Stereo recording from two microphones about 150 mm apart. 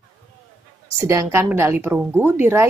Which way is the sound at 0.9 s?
20° right (ahead or behind).